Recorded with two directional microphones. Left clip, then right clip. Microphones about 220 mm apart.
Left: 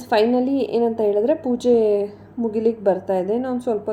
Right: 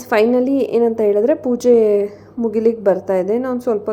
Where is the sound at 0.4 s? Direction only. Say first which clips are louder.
Right 4 dB; 35° right (ahead or behind).